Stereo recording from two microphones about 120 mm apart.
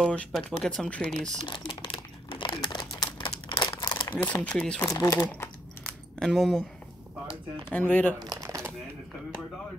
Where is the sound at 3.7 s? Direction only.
35° left (ahead or behind).